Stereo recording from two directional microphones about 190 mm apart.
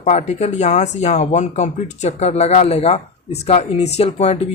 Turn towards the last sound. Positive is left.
turn(degrees=35)  # may be behind; listen again after turning